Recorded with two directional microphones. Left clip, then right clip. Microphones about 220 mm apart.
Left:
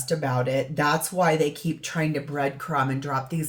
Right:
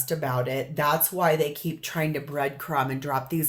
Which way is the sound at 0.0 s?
35° right (ahead or behind).